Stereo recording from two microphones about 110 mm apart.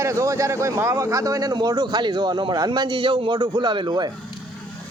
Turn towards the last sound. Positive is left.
turn(degrees=-40)  # may be behind; listen again after turning